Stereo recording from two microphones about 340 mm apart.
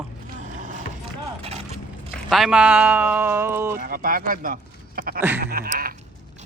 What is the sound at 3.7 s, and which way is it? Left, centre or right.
Speech, right.